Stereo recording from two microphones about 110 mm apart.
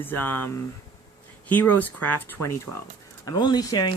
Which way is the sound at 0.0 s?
20° left (ahead or behind).